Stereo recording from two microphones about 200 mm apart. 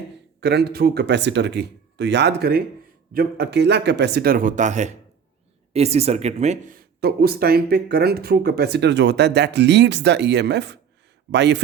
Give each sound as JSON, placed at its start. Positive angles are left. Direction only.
{"t": 0.3, "sound": "speech", "side_deg": -55}